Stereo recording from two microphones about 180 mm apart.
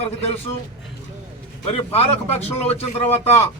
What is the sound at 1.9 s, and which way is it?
Speech, 35° left (ahead or behind).